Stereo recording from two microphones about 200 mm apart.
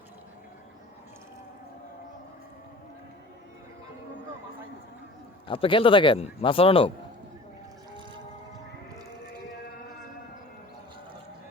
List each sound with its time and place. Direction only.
5.5 s speech: 25° left (ahead or behind)